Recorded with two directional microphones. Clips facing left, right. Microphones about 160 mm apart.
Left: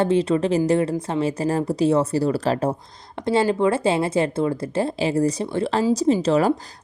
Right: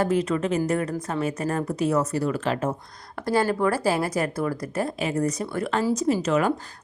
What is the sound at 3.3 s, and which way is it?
Speech, 20° left (ahead or behind).